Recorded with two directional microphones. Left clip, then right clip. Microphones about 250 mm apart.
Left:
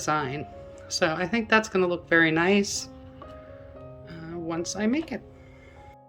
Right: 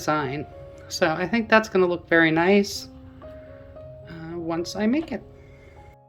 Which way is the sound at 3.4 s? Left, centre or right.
Centre.